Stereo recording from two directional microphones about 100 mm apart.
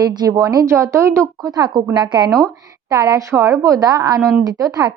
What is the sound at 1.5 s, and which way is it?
Speech, 45° right (ahead or behind).